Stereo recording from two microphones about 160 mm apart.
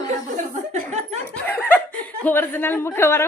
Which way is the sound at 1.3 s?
10° left (ahead or behind).